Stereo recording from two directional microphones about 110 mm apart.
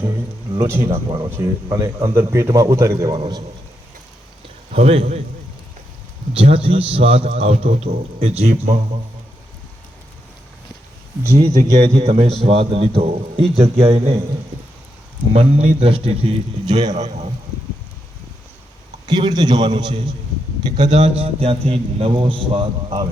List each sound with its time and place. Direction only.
0.7 s a man's voice: 25° right (ahead or behind)
4.7 s a man's voice: 65° right (ahead or behind)
6.3 s a man's voice: 60° right (ahead or behind)
11.2 s a man's voice: 30° right (ahead or behind)
12.0 s a man's voice: 65° right (ahead or behind)
15.3 s a man's voice: 65° right (ahead or behind)
16.9 s a man's voice: 90° right
19.0 s a man's voice: 40° right (ahead or behind)
20.8 s a man's voice: 75° right (ahead or behind); by 23.0 s 50° right (ahead or behind)